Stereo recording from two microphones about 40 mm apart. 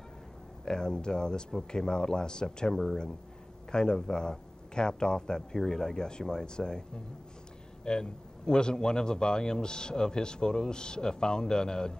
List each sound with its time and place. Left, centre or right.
0.7 s a man's voice: centre
7.8 s a man's voice: centre